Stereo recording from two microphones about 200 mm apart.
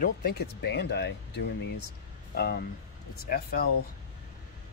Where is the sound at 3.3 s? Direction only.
50° left (ahead or behind).